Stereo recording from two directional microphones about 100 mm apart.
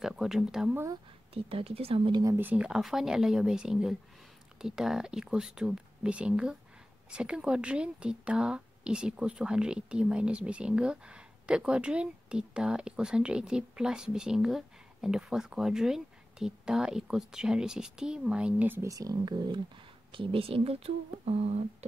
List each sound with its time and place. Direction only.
0.0 s speech: 5° right (ahead or behind)
1.3 s speech: 70° right (ahead or behind)
2.3 s speech: 15° right (ahead or behind)
18.8 s speech: 35° right (ahead or behind)
20.1 s speech: 60° right (ahead or behind); by 21.6 s 90° right